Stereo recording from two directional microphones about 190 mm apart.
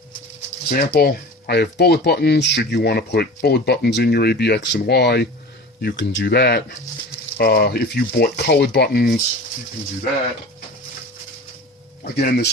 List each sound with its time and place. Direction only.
0.7 s speech: 55° left (ahead or behind)
12.1 s speech: 55° left (ahead or behind)